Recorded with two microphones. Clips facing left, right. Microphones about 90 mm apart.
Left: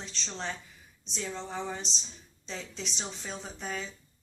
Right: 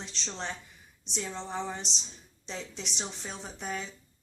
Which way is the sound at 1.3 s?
20° right (ahead or behind).